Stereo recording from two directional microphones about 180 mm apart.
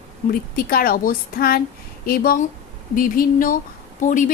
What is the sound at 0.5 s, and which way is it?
A woman's voice, 55° left (ahead or behind).